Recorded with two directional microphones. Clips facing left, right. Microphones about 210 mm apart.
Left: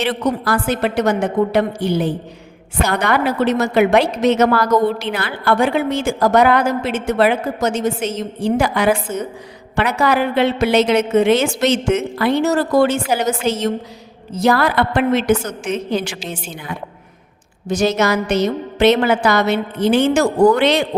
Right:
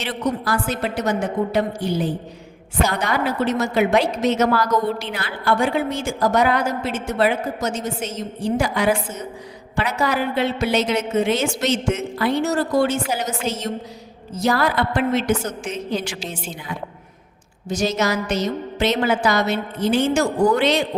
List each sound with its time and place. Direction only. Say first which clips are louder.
0.0 s a woman's voice: left 5 dB; 60° left (ahead or behind); by 13.2 s 80° left
14.3 s a woman's voice: left 4 dB; 65° left (ahead or behind)